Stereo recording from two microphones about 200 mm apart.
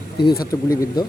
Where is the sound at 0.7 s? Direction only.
15° left (ahead or behind).